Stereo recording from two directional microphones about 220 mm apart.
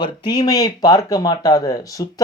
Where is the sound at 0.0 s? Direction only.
20° left (ahead or behind).